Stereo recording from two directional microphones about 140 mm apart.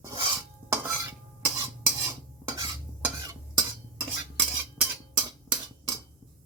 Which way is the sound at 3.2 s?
30° right (ahead or behind).